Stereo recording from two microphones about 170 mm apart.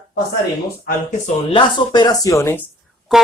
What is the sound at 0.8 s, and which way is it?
Speech, 50° left (ahead or behind).